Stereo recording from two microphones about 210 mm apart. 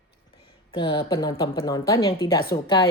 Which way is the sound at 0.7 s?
20° left (ahead or behind).